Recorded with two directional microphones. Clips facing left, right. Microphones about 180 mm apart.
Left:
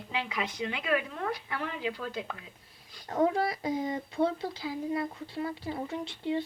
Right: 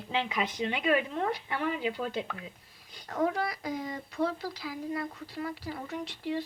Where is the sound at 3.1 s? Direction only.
30° left (ahead or behind).